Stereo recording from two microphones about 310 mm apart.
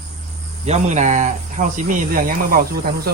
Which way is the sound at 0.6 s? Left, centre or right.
Right.